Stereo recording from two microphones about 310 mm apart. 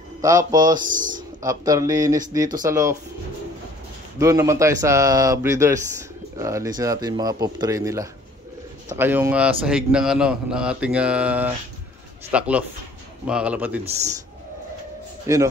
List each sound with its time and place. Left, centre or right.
0.2 s speech: centre
0.7 s speech: right
1.4 s speech: centre
4.2 s a man's voice: centre
15.3 s speech: centre